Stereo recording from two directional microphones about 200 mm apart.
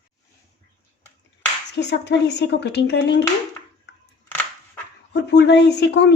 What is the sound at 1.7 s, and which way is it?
A woman's voice, 60° left (ahead or behind).